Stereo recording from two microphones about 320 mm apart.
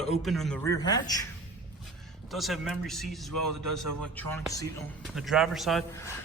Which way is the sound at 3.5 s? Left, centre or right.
Right.